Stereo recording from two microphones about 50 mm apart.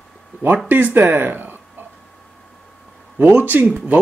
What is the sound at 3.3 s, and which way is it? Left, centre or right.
Speech, right.